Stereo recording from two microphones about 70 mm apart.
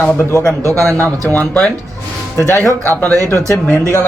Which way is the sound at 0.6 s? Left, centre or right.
Right.